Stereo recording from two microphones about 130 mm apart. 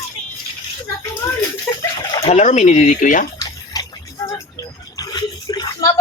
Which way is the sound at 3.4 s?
30° left (ahead or behind).